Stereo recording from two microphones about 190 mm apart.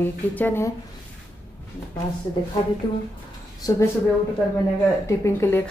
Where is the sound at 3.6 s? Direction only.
20° left (ahead or behind).